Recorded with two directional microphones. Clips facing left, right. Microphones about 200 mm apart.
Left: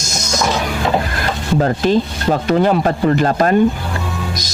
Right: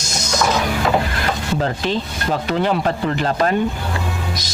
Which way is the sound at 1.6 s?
45° left (ahead or behind).